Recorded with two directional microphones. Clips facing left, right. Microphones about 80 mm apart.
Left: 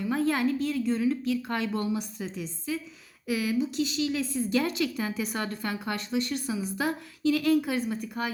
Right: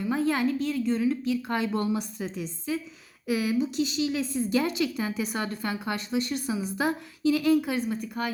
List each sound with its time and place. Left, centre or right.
0.1 s a woman's voice: centre
1.7 s a woman's voice: right; by 8.3 s centre